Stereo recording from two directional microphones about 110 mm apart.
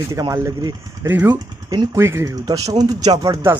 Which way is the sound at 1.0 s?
20° right (ahead or behind).